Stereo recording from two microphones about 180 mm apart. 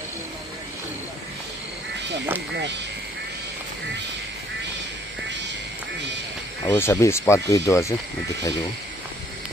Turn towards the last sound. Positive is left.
turn(degrees=15)  # may be behind; listen again after turning